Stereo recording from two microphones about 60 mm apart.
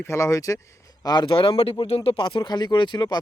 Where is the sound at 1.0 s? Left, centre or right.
Left.